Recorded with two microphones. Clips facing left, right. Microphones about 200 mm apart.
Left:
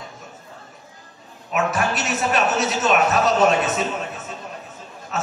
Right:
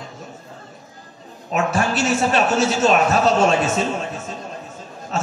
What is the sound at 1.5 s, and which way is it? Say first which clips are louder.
A man's voice: right 2 dB; 30° right (ahead or behind).